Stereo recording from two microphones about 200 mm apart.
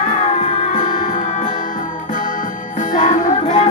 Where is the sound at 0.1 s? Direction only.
35° left (ahead or behind).